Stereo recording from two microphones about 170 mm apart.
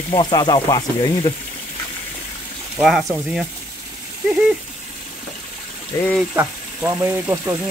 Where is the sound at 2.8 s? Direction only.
Centre (ahead or behind).